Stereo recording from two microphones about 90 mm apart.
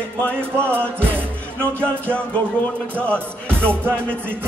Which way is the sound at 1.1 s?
15° left (ahead or behind).